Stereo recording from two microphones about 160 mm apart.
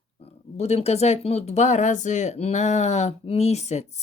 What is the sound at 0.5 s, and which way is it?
A woman's voice, 40° left (ahead or behind).